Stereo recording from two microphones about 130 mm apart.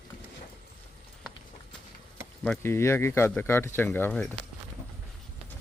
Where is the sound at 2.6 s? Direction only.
20° left (ahead or behind).